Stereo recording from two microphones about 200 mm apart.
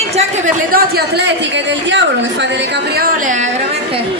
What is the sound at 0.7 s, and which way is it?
Speech, 55° right (ahead or behind).